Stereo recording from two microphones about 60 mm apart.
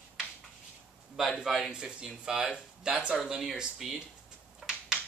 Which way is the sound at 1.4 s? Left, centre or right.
Centre.